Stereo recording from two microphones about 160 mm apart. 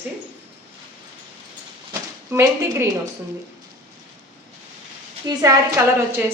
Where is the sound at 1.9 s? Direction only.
20° right (ahead or behind).